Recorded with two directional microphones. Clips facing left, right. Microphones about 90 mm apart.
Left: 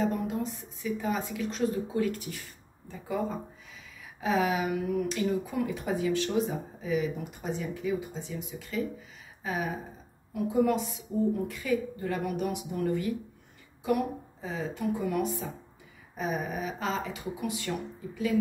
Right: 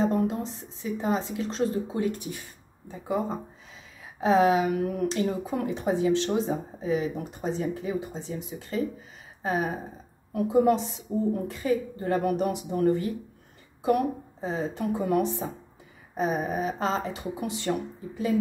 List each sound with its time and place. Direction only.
0.0 s speech: 30° right (ahead or behind)
3.7 s speech: 30° right (ahead or behind)
14.4 s speech: 35° right (ahead or behind)